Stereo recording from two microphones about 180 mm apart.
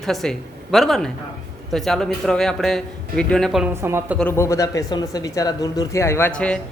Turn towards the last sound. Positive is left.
turn(degrees=5)  # may be behind; listen again after turning